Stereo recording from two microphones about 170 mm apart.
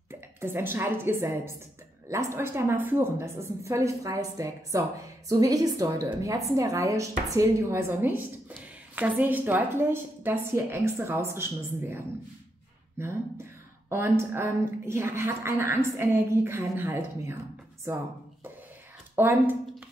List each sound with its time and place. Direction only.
0.1 s a woman's voice: 15° right (ahead or behind)
13.0 s a woman's voice: 15° right (ahead or behind)
19.1 s a woman's voice: 10° right (ahead or behind)